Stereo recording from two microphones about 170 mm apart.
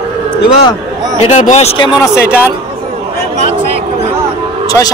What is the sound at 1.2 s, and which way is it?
Speech, 40° left (ahead or behind).